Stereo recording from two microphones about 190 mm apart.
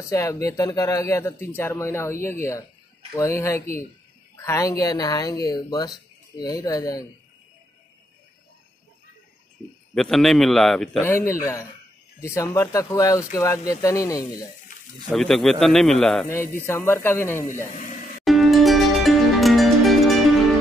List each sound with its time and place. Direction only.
0.1 s speech: 15° left (ahead or behind)
9.9 s a man's voice: centre (ahead or behind)
11.0 s speech: 15° left (ahead or behind)
15.0 s a man's voice: centre (ahead or behind)
16.3 s speech: 15° left (ahead or behind)
18.2 s music: centre (ahead or behind)